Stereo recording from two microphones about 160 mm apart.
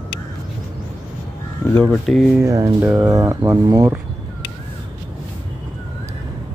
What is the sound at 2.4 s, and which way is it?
Speech, 20° right (ahead or behind).